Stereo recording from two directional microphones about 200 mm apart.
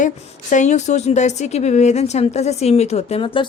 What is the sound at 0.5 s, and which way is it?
A woman's voice, 35° left (ahead or behind).